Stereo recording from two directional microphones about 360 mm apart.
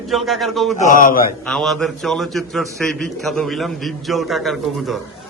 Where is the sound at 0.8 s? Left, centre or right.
Left.